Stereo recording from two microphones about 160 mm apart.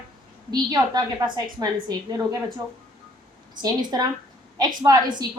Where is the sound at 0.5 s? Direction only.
25° right (ahead or behind).